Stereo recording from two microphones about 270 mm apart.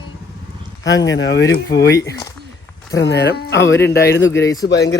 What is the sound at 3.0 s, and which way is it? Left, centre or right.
Speech, left.